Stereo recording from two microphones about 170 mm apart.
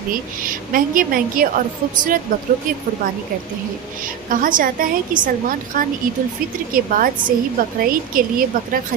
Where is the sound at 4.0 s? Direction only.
55° right (ahead or behind).